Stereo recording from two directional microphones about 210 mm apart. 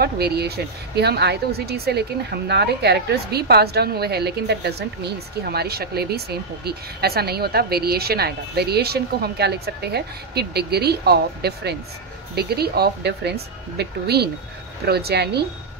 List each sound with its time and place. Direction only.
0.0 s a woman's voice: 50° right (ahead or behind)